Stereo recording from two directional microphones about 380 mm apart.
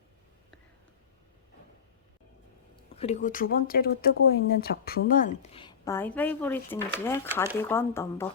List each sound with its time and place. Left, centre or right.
2.9 s speech: centre